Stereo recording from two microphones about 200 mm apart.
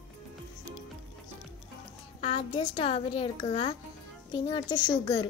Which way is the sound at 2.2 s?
30° left (ahead or behind).